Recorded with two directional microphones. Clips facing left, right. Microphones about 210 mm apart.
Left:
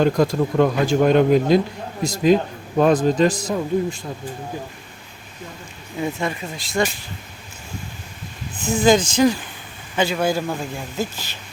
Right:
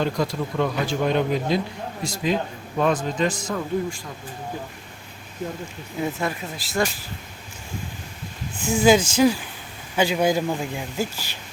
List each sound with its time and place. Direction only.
0.0 s a man's voice: 45° left (ahead or behind)
3.5 s speech: 20° left (ahead or behind)
6.0 s speech: centre (ahead or behind)
8.6 s speech: 10° right (ahead or behind)